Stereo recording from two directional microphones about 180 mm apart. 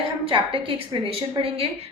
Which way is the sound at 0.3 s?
30° right (ahead or behind).